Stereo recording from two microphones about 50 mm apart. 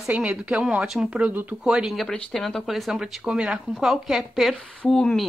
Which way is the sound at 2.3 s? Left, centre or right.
Centre.